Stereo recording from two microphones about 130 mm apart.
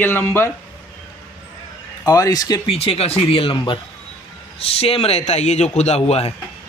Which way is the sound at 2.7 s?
50° left (ahead or behind).